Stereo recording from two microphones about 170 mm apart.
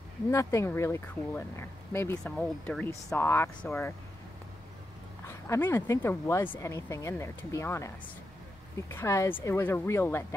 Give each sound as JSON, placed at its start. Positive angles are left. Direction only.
{"t": 0.3, "sound": "speech", "side_deg": 15}
{"t": 2.2, "sound": "speech", "side_deg": 5}
{"t": 5.2, "sound": "speech", "side_deg": 15}